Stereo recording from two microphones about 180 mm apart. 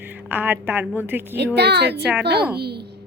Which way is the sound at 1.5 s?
65° right (ahead or behind).